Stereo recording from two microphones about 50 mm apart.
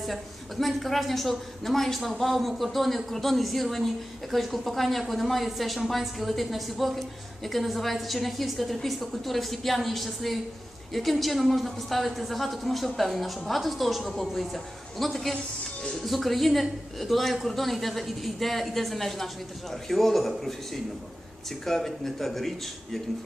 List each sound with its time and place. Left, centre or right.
0.0 s a woman's voice: centre
15.3 s music: centre
16.0 s a woman's voice: centre